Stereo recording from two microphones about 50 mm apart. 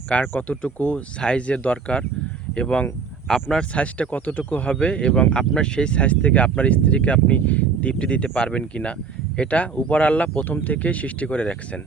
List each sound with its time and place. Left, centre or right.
0.1 s speech: left